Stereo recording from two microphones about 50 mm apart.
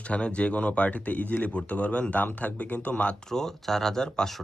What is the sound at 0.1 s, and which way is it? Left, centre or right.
Speech, left.